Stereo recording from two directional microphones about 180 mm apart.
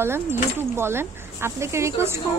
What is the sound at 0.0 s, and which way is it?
Speech, 15° right (ahead or behind).